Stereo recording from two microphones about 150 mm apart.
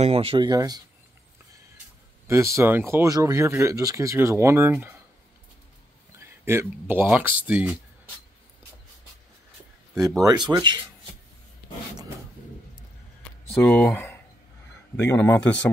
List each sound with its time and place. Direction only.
0.0 s speech: 40° right (ahead or behind)
2.2 s speech: 20° right (ahead or behind)
6.1 s speech: 15° right (ahead or behind)
10.2 s speech: 30° right (ahead or behind)
13.6 s speech: 10° left (ahead or behind)